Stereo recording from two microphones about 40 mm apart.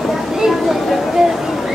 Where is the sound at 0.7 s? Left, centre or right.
Centre.